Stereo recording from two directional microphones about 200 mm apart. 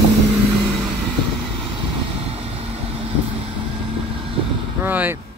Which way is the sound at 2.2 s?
30° right (ahead or behind).